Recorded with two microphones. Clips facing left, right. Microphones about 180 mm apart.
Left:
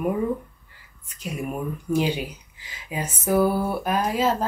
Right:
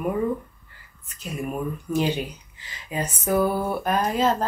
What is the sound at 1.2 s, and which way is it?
Speech, 10° left (ahead or behind).